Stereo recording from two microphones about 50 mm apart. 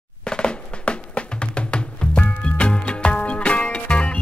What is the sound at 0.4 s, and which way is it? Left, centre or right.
Music, left.